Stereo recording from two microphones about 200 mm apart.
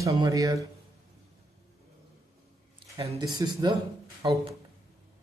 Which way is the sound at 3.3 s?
20° right (ahead or behind).